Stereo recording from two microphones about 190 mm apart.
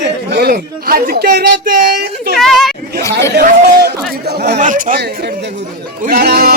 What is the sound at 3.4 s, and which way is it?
Speech, 55° right (ahead or behind).